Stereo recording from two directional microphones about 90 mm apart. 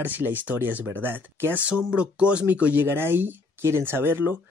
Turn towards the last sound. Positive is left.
turn(degrees=-25)  # may be behind; listen again after turning